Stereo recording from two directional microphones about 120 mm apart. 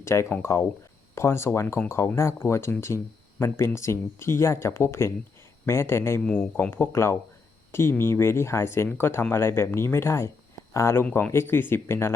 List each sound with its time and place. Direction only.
0.0 s speech: 25° left (ahead or behind)